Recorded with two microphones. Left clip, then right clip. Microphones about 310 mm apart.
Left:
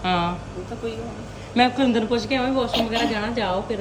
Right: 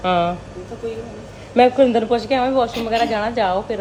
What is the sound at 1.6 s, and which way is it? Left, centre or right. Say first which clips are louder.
A woman's voice: right 6 dB; centre.